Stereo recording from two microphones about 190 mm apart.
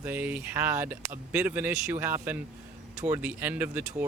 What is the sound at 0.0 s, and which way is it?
Speech, 10° right (ahead or behind).